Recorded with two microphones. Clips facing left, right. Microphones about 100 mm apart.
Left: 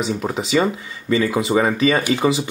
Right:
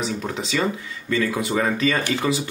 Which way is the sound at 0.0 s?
20° left (ahead or behind).